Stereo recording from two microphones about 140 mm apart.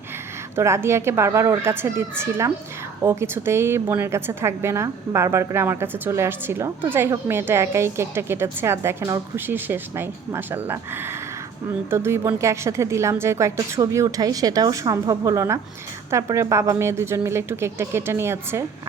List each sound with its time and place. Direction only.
0.5 s a woman's voice: 20° right (ahead or behind)